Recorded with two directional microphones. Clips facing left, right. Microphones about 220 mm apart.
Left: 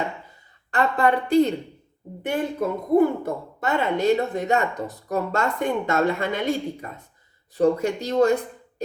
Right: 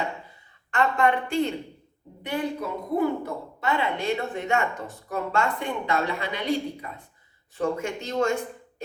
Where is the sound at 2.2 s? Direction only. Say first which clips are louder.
Left 4 dB; 50° left (ahead or behind).